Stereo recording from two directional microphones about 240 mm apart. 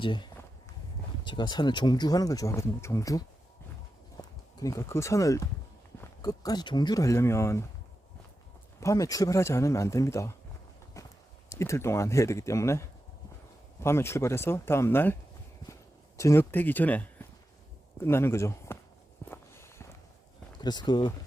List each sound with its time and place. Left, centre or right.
0.0 s a sound: centre
1.2 s speech: centre
8.8 s speech: centre
11.0 s clip-clop: centre
11.4 s speech: centre
19.3 s walk: centre
20.6 s speech: centre